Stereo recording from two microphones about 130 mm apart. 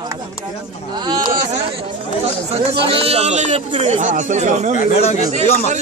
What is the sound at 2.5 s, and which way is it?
Speech, 45° right (ahead or behind).